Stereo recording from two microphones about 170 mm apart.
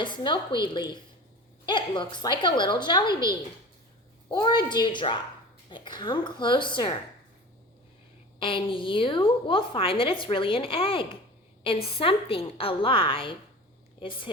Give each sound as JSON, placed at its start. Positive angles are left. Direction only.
{"t": 0.0, "sound": "a woman's voice", "side_deg": 25}
{"t": 4.3, "sound": "a woman's voice", "side_deg": 25}
{"t": 8.4, "sound": "a woman's voice", "side_deg": 30}